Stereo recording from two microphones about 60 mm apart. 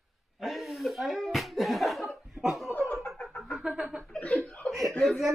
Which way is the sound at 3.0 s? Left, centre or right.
Centre.